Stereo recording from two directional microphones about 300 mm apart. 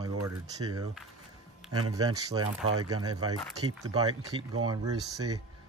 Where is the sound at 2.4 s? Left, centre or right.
Right.